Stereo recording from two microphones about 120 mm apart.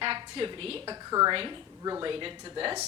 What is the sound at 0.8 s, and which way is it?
Speech, 30° right (ahead or behind).